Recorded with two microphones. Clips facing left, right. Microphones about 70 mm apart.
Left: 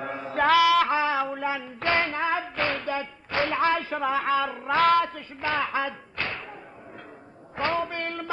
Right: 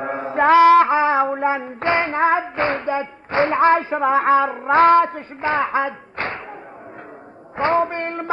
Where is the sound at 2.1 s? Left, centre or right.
Right.